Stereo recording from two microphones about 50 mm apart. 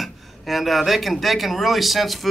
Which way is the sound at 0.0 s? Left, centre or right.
Centre.